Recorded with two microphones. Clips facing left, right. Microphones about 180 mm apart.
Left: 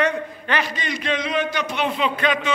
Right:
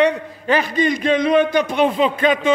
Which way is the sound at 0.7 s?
50° right (ahead or behind).